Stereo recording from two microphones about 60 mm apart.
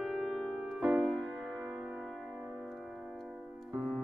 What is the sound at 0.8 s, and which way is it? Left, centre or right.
Music, centre.